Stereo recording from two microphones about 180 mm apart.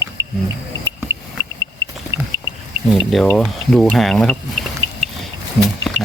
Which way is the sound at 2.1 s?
90° right.